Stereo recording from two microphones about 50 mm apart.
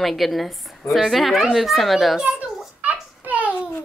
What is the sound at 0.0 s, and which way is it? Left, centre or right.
A woman's voice, centre.